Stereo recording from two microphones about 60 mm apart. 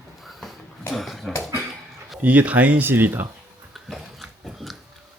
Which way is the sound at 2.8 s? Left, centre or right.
Right.